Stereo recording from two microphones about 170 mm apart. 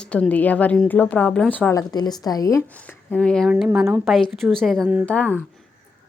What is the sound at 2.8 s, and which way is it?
Speech, 5° left (ahead or behind).